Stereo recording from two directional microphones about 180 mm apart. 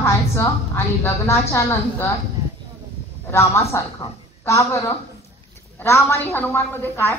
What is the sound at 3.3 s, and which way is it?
A woman's voice, 15° left (ahead or behind).